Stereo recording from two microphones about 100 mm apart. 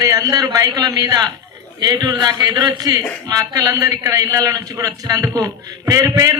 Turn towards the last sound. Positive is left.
turn(degrees=-35)  # may be behind; listen again after turning